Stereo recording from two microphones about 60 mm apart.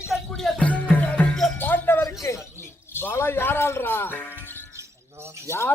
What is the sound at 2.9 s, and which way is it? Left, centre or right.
Speech, left.